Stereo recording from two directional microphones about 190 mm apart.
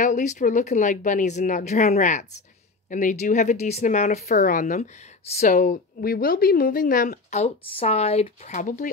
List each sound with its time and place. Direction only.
0.0 s a woman's voice: 40° left (ahead or behind)